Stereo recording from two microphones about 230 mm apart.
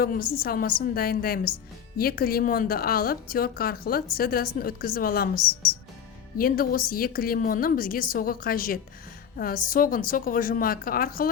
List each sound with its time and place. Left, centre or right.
0.0 s a woman's voice: left